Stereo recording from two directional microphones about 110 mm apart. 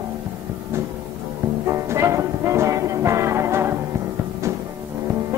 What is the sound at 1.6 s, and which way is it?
Music, 25° right (ahead or behind).